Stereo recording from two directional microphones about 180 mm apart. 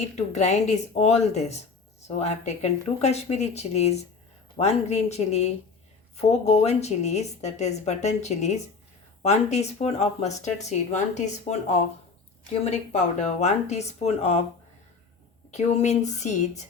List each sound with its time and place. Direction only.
0.0 s speech: 40° left (ahead or behind)
15.5 s speech: 40° left (ahead or behind)